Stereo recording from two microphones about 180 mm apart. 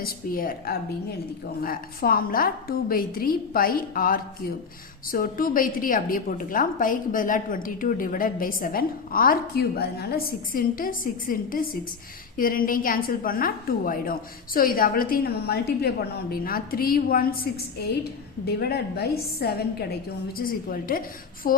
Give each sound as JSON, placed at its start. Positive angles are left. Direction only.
{"t": 0.0, "sound": "a woman's voice", "side_deg": 50}